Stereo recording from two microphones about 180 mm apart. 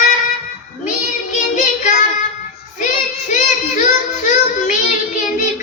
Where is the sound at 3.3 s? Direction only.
45° left (ahead or behind).